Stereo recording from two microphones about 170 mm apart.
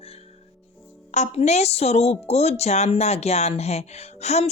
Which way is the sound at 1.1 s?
40° left (ahead or behind).